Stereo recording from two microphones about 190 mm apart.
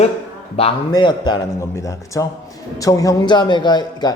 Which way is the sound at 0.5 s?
25° left (ahead or behind).